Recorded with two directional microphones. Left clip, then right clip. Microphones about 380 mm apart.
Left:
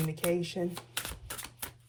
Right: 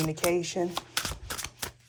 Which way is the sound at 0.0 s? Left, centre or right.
Centre.